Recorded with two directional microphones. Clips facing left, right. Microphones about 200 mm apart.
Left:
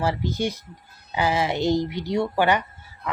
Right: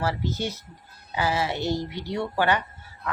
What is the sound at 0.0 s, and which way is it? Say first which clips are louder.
A woman's voice: left 3 dB; 15° left (ahead or behind).